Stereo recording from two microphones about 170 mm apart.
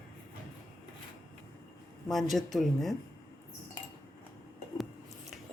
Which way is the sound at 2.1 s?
Centre (ahead or behind).